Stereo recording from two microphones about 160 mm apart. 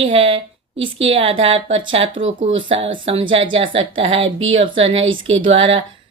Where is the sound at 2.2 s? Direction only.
45° right (ahead or behind).